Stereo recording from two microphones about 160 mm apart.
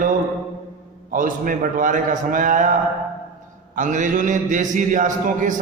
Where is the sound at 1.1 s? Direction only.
55° right (ahead or behind).